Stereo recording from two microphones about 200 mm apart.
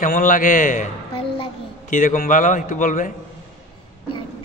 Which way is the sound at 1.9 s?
40° left (ahead or behind).